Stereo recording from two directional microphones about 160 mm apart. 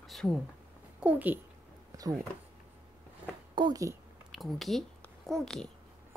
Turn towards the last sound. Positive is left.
turn(degrees=5)  # may be behind; listen again after turning